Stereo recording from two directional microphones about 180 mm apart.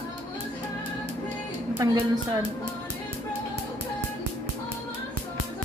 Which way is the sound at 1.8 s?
20° right (ahead or behind).